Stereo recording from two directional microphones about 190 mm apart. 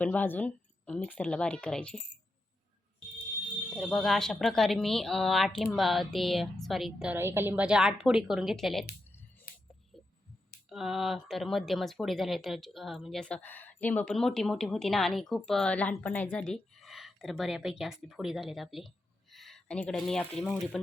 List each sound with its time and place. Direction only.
0.0 s a woman's voice: 10° left (ahead or behind)
3.8 s speech: centre (ahead or behind)
9.5 s music: 50° left (ahead or behind)
9.9 s a sound: centre (ahead or behind)
10.7 s speech: centre (ahead or behind)